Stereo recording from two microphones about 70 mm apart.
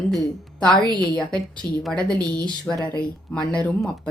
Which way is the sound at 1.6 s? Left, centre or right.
Left.